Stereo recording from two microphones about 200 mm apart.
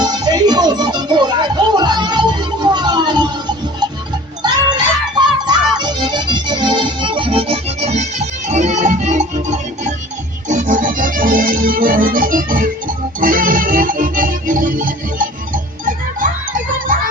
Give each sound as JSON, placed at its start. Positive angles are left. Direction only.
{"t": 0.0, "sound": "music", "side_deg": -20}
{"t": 2.7, "sound": "a sound", "side_deg": -20}
{"t": 4.4, "sound": "music", "side_deg": -20}